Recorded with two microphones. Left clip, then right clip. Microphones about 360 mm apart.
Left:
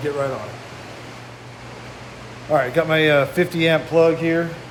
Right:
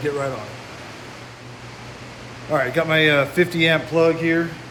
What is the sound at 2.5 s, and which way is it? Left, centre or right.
A man's voice, centre.